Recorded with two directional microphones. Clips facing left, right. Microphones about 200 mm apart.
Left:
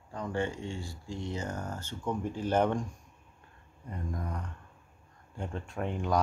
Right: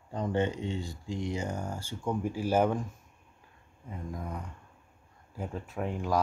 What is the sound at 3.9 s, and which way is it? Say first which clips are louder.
Speech: even; 5° right (ahead or behind).